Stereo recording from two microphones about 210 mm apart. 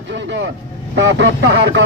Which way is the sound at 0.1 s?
60° right (ahead or behind).